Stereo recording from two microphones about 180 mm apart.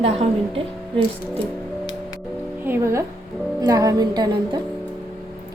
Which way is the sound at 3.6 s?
20° right (ahead or behind).